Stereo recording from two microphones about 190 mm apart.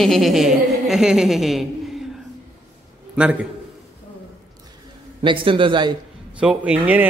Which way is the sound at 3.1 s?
5° right (ahead or behind).